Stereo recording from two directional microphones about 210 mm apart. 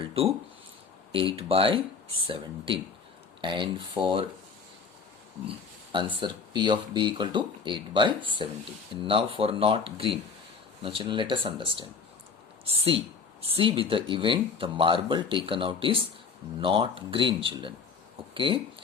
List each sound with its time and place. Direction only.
0.1 s speech: 30° right (ahead or behind)
5.5 s a sound: 20° right (ahead or behind)
6.1 s speech: 20° right (ahead or behind)